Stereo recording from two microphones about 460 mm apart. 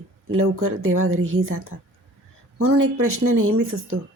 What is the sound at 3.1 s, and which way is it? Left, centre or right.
Speech, right.